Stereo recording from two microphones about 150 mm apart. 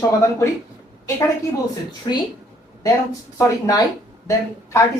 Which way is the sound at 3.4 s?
20° left (ahead or behind).